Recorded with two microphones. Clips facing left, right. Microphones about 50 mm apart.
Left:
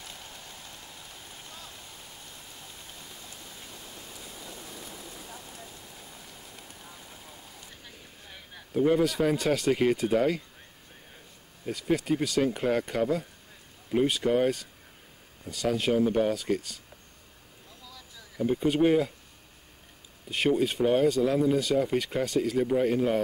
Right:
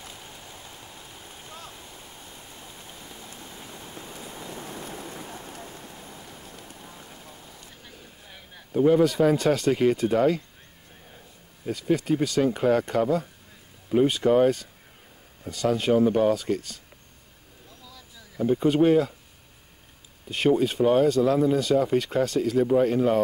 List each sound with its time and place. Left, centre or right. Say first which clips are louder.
0.1 s rain on surface: right 2 dB; centre
2.5 s rain: right 3 dB; centre
3.3 s pink noise: right 4 dB; right
4.1 s rain: right 7 dB; right
7.8 s speech: right 2 dB; centre
11.6 s speech: right 3 dB; centre
17.8 s a sound: left 1 dB; centre
20.2 s speech: right 3 dB; centre